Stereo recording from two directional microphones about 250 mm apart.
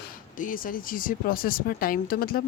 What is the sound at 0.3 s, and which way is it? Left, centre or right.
Speech, left.